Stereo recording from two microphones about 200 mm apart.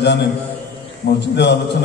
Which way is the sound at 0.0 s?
60° left (ahead or behind).